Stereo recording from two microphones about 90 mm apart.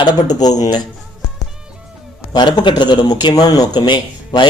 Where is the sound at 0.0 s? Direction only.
50° left (ahead or behind).